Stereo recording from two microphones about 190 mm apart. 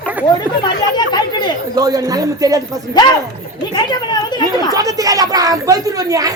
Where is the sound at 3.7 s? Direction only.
20° left (ahead or behind).